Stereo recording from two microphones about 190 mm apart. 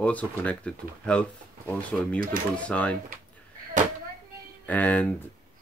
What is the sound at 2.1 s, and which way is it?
Speech, 50° right (ahead or behind).